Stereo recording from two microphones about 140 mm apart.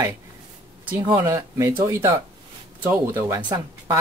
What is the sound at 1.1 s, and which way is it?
Speech, 20° right (ahead or behind).